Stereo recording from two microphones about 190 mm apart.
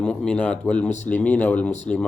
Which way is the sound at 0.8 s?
40° left (ahead or behind).